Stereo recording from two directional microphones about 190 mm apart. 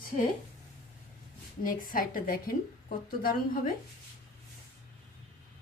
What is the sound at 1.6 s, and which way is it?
A woman's voice, 45° left (ahead or behind).